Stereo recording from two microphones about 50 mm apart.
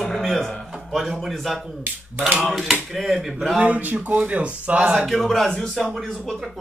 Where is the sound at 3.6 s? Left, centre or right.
Right.